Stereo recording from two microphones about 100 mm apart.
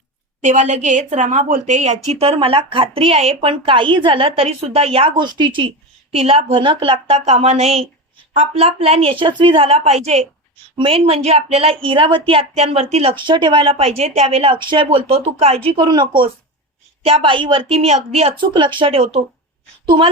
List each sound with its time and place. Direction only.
2.0 s speech: 90° right; by 5.2 s 70° right (ahead or behind)
5.2 s speech: 50° right (ahead or behind)
6.1 s speech: 80° right
10.8 s speech: 65° right (ahead or behind)
14.6 s speech: 50° right (ahead or behind)
14.8 s speech: 70° right (ahead or behind)
15.8 s speech: 50° right (ahead or behind)
17.0 s speech: 70° right (ahead or behind)
18.4 s speech: 50° right (ahead or behind); by 19.2 s 70° right (ahead or behind)
19.8 s a woman's voice: 55° right (ahead or behind)